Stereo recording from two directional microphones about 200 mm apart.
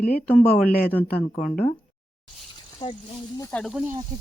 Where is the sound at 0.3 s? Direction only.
5° left (ahead or behind).